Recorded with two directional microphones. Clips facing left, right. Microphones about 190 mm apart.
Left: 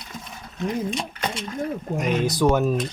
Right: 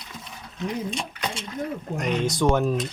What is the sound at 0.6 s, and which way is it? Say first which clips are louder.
Speech: left 3 dB; 50° left (ahead or behind).